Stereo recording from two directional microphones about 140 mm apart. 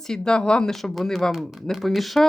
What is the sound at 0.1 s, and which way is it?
Speech, 5° left (ahead or behind).